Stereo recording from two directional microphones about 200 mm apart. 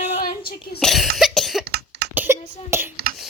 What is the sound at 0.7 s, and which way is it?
Cough, centre (ahead or behind).